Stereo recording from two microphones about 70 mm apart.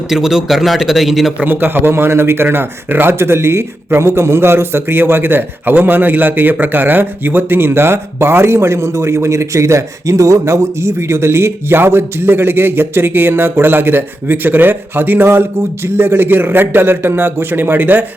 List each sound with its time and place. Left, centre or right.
0.1 s speech: centre
1.5 s a man's voice: right